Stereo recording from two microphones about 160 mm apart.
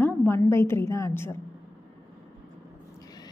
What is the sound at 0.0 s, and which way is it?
A woman's voice, 15° left (ahead or behind).